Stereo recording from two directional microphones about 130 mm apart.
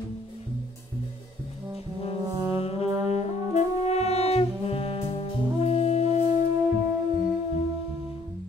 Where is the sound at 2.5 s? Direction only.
50° left (ahead or behind).